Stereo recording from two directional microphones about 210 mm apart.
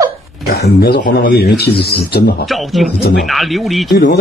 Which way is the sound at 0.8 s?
50° left (ahead or behind).